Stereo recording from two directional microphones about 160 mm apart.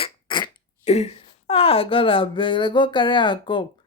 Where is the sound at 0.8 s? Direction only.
40° left (ahead or behind).